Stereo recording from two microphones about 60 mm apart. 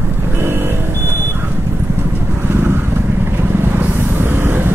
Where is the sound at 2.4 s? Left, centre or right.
Right.